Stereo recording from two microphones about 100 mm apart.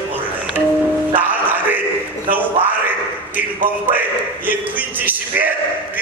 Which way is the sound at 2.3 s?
15° right (ahead or behind).